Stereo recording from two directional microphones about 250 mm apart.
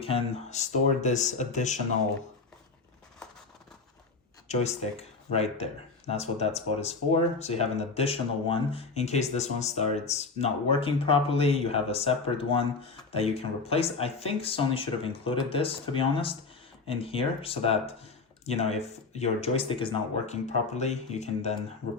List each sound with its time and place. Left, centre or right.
0.0 s speech: left
4.4 s speech: left